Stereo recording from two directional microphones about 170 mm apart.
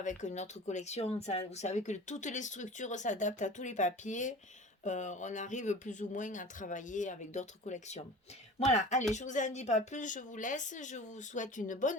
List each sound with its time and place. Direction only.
0.0 s speech: 45° left (ahead or behind)